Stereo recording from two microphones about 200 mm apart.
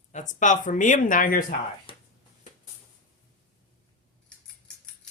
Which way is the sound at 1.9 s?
25° left (ahead or behind).